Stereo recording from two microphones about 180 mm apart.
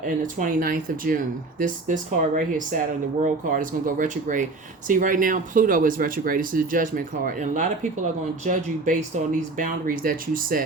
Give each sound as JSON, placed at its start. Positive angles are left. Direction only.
{"t": 0.0, "sound": "speech", "side_deg": -45}